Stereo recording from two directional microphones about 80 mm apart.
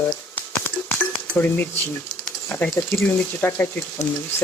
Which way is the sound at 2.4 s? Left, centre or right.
Left.